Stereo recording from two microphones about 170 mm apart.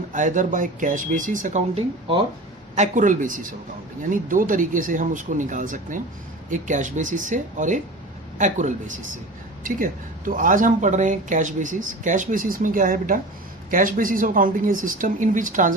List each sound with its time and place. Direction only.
0.1 s speech: 50° right (ahead or behind)
2.7 s speech: 45° right (ahead or behind)